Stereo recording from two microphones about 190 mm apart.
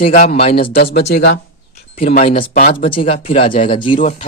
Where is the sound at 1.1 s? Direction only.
60° left (ahead or behind).